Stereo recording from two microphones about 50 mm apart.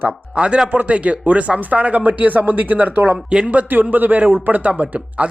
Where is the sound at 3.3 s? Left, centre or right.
Right.